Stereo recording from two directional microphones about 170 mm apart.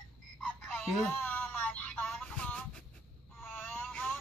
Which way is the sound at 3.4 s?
10° left (ahead or behind).